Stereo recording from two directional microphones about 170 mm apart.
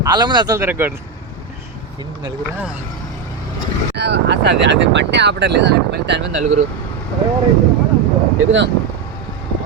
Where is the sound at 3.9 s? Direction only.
90° right.